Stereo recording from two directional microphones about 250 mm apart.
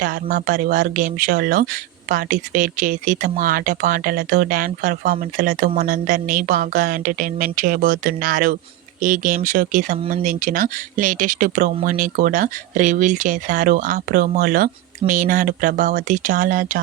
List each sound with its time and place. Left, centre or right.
0.0 s speech: right